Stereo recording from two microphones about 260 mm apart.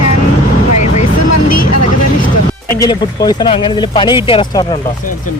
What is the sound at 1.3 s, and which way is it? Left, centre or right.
Vehicle, left.